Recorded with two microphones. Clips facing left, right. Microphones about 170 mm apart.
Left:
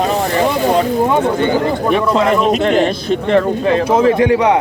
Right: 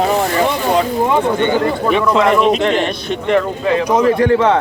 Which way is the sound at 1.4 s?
35° left (ahead or behind).